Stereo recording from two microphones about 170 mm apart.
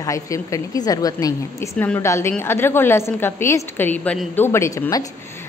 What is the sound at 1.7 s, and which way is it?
A woman's voice, 10° left (ahead or behind).